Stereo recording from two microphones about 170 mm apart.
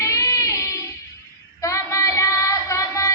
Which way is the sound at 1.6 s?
15° left (ahead or behind).